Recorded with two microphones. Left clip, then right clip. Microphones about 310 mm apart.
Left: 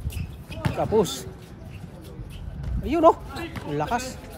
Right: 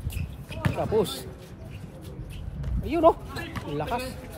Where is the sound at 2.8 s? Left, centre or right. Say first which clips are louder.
Left 3 dB; left.